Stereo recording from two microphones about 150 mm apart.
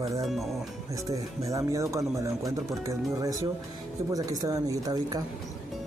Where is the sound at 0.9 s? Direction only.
20° right (ahead or behind).